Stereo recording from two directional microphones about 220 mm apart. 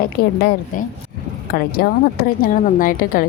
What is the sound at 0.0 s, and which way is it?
A woman's voice, 40° left (ahead or behind).